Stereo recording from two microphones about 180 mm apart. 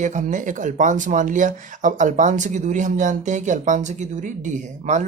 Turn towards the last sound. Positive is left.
turn(degrees=-45)  # may be behind; listen again after turning